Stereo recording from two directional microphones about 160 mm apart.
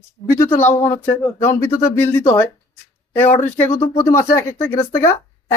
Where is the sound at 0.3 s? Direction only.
15° left (ahead or behind).